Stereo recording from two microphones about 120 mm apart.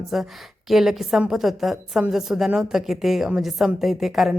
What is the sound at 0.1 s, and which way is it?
A woman's voice, 5° right (ahead or behind).